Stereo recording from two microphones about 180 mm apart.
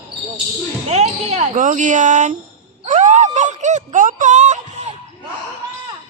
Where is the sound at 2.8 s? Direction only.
45° right (ahead or behind).